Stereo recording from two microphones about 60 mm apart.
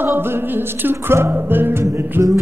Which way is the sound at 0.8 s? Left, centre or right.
Right.